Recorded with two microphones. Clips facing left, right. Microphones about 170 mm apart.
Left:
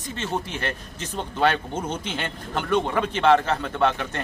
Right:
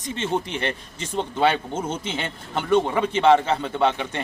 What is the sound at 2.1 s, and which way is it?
A man's voice, 10° right (ahead or behind).